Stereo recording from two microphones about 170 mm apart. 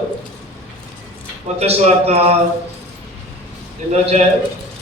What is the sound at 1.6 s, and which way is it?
Speech, 40° right (ahead or behind).